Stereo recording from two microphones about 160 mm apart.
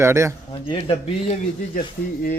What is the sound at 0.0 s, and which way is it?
Speech, 15° right (ahead or behind).